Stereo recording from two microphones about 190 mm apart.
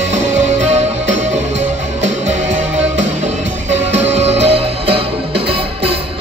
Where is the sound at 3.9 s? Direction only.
35° right (ahead or behind).